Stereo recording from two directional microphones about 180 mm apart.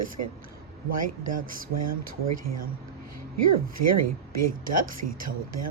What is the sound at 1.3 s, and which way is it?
Speech, 50° right (ahead or behind).